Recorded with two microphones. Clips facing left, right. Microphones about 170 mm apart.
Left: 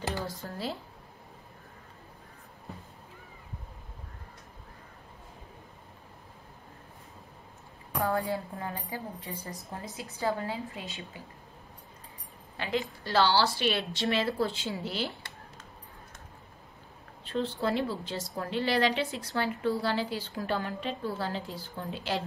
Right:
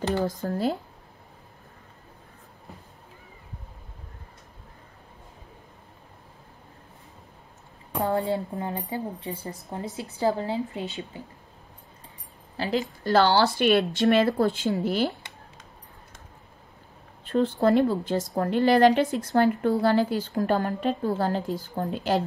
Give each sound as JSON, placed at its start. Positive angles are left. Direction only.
{"t": 0.1, "sound": "a woman's voice", "side_deg": -55}
{"t": 7.9, "sound": "speech", "side_deg": -20}
{"t": 9.3, "sound": "speech", "side_deg": 0}
{"t": 10.1, "sound": "speech", "side_deg": -30}
{"t": 12.5, "sound": "a woman's voice", "side_deg": -35}
{"t": 13.0, "sound": "a woman's voice", "side_deg": -50}
{"t": 17.2, "sound": "a woman's voice", "side_deg": -50}